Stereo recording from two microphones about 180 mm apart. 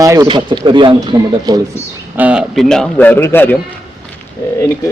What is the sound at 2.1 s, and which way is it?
A man's voice, 5° right (ahead or behind).